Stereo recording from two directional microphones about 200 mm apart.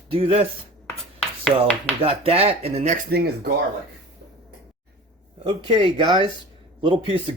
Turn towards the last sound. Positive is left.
turn(degrees=-25)  # may be behind; listen again after turning